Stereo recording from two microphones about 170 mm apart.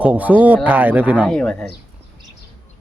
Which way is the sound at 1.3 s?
5° left (ahead or behind).